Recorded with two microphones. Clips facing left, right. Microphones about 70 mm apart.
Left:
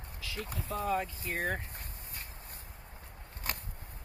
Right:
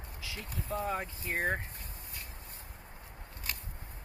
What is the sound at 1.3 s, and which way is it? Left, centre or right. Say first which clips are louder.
Speech: right 3 dB; right.